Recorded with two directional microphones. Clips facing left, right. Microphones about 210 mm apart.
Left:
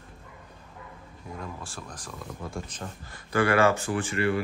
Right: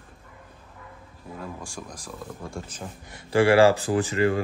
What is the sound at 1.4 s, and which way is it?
Speech, 15° right (ahead or behind).